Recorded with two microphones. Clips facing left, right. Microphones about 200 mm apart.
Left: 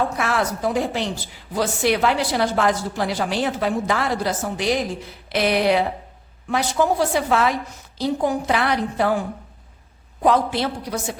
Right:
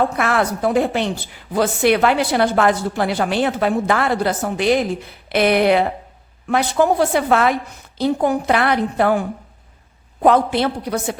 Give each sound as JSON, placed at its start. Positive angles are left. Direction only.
{"t": 0.2, "sound": "a woman's voice", "side_deg": -60}
{"t": 10.2, "sound": "a woman's voice", "side_deg": -60}